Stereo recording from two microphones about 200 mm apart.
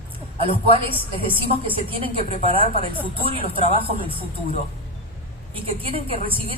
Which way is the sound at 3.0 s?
25° right (ahead or behind).